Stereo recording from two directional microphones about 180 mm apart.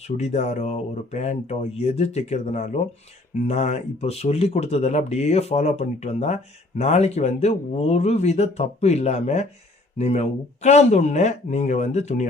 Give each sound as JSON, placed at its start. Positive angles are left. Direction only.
{"t": 0.2, "sound": "speech", "side_deg": 40}